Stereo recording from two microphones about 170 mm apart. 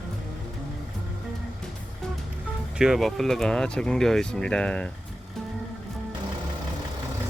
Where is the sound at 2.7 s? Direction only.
Centre (ahead or behind).